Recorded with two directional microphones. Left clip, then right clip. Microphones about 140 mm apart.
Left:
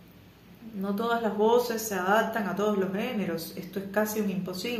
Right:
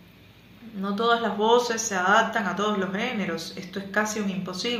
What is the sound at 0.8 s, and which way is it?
A man's voice, 15° left (ahead or behind).